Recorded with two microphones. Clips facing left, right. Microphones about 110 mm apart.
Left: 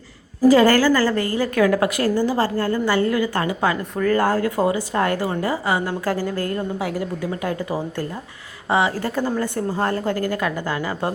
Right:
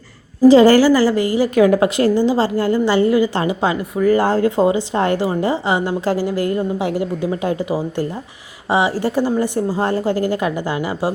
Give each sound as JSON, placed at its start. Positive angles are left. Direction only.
{"t": 0.4, "sound": "a woman's voice", "side_deg": -20}